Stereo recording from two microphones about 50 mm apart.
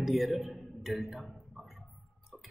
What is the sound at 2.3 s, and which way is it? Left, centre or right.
Tick-tock, centre.